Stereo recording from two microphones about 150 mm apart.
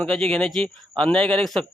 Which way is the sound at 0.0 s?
5° left (ahead or behind).